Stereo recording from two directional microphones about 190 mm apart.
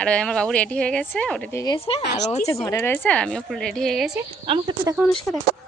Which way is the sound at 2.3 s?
35° left (ahead or behind).